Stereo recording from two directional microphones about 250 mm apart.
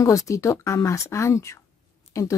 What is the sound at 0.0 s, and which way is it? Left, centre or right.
Speech, centre.